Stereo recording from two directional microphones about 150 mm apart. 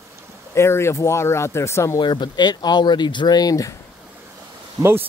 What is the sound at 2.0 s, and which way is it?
Speech, 30° left (ahead or behind).